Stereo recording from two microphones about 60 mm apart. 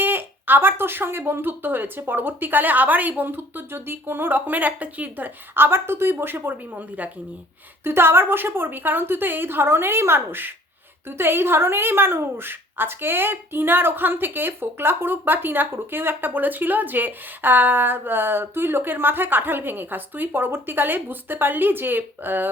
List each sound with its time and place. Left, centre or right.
0.0 s a woman's voice: right
7.9 s a woman's voice: right